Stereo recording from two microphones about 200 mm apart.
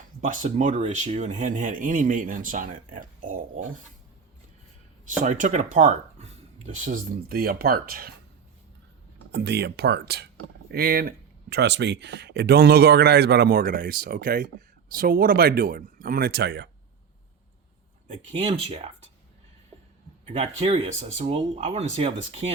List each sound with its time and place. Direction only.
0.2 s speech: 35° right (ahead or behind)
5.0 s speech: 40° right (ahead or behind)
9.3 s speech: 55° right (ahead or behind)
18.1 s speech: 30° right (ahead or behind)
20.2 s speech: 30° right (ahead or behind)